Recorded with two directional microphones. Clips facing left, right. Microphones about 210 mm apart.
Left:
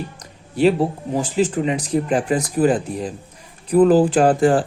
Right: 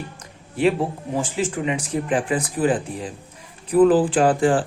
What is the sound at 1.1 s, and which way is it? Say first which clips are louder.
Speech: left 5 dB; 40° left (ahead or behind).